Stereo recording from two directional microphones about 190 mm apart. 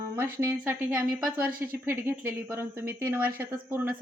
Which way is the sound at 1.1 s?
50° right (ahead or behind).